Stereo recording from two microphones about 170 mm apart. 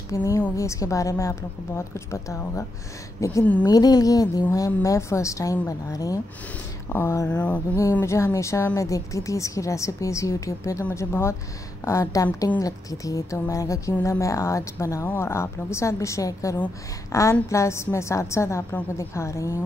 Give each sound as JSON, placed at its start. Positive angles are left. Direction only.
{"t": 0.1, "sound": "a woman's voice", "side_deg": 20}